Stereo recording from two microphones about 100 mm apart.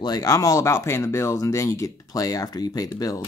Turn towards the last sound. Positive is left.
turn(degrees=40)  # may be behind; listen again after turning